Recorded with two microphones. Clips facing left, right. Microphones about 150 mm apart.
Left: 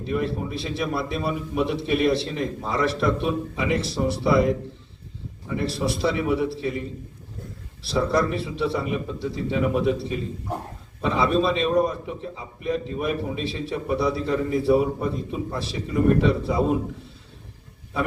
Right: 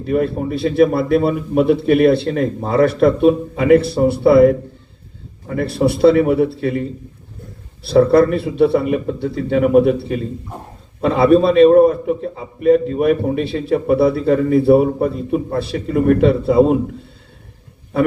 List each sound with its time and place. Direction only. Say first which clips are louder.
0.0 s a man's voice: right 8 dB; 55° right (ahead or behind)